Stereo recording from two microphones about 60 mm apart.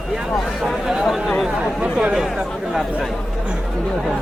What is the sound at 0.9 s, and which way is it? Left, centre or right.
Speech, centre.